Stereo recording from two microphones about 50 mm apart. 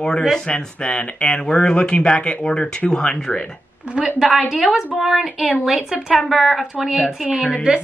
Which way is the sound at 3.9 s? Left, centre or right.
Centre.